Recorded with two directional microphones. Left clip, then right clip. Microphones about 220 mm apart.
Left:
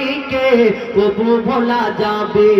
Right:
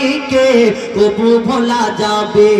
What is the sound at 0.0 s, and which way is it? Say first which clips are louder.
Music: right 4 dB; 60° right (ahead or behind).